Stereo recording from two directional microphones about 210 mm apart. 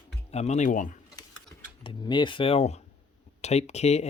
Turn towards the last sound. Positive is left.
turn(degrees=30)  # may be behind; listen again after turning